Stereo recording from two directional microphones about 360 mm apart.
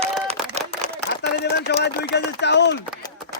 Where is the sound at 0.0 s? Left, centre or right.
Centre.